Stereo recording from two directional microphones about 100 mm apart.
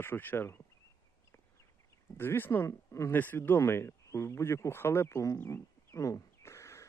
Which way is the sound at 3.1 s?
20° left (ahead or behind).